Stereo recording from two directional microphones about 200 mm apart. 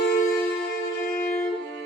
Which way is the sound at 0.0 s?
55° left (ahead or behind).